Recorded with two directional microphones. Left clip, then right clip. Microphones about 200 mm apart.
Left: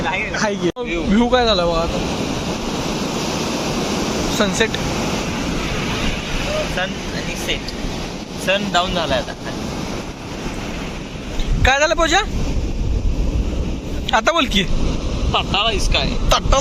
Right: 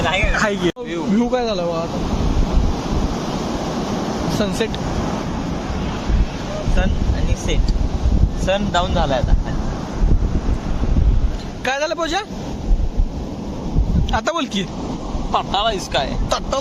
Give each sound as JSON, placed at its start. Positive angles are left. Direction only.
{"t": 0.3, "sound": "speech", "side_deg": 5}
{"t": 4.4, "sound": "speech", "side_deg": -5}
{"t": 8.4, "sound": "speech", "side_deg": -50}
{"t": 11.6, "sound": "speech", "side_deg": 0}
{"t": 14.1, "sound": "speech", "side_deg": -5}